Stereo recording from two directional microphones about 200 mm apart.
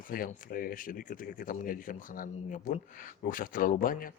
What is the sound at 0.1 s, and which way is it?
Speech, 45° left (ahead or behind).